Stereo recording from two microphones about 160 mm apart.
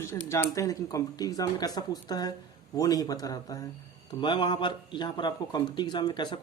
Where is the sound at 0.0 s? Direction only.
15° left (ahead or behind).